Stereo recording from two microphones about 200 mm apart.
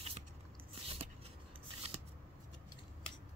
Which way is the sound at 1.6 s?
30° right (ahead or behind).